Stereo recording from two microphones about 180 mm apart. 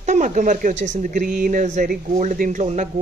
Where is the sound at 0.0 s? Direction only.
45° right (ahead or behind).